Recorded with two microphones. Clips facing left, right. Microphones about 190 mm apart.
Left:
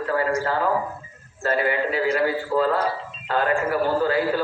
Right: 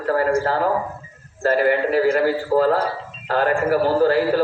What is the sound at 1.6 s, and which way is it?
A man's voice, 45° right (ahead or behind).